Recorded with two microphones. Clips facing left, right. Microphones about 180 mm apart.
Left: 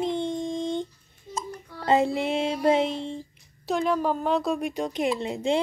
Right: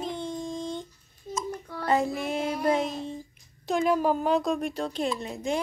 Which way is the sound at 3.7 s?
5° right (ahead or behind).